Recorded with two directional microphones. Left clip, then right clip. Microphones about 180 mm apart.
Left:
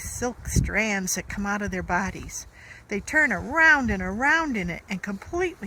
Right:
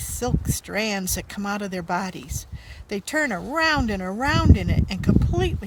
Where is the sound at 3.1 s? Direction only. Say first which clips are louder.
Left 3 dB; 90° right.